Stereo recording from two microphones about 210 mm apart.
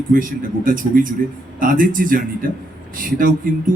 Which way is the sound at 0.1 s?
40° right (ahead or behind).